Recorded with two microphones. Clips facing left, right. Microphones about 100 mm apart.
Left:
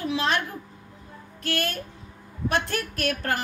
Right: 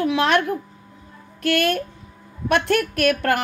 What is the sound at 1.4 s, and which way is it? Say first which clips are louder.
A woman's voice: right 9 dB; 65° right (ahead or behind).